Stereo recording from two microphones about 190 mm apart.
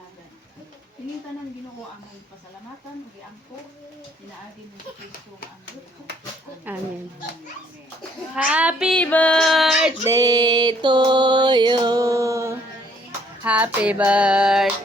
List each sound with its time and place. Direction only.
8.4 s child singing: 5° right (ahead or behind)
9.0 s music: 5° left (ahead or behind)
10.1 s music: 20° right (ahead or behind)
13.1 s female singing: 10° right (ahead or behind)